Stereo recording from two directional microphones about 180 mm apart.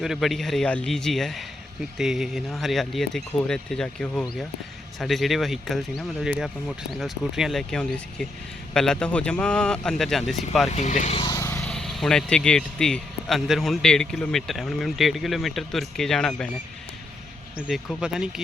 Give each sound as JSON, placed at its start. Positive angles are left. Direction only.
{"t": 0.0, "sound": "speech", "side_deg": 0}
{"t": 10.7, "sound": "speech", "side_deg": 40}
{"t": 11.2, "sound": "vehicle", "side_deg": 20}
{"t": 11.6, "sound": "speech", "side_deg": 5}
{"t": 17.7, "sound": "speech", "side_deg": -5}